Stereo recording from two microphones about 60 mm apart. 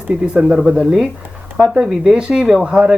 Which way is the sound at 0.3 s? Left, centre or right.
Centre.